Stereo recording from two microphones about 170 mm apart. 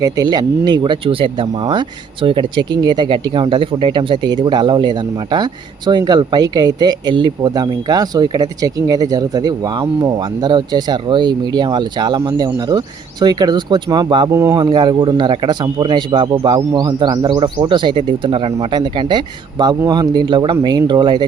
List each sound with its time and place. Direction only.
0.0 s speech: 20° right (ahead or behind)